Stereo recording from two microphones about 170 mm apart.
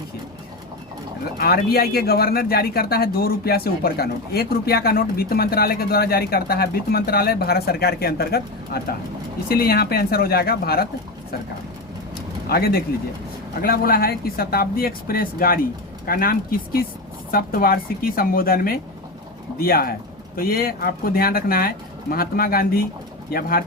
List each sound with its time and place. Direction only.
1.4 s speech: 65° left (ahead or behind)
12.1 s vehicle: 65° left (ahead or behind)
13.6 s speech: 60° left (ahead or behind)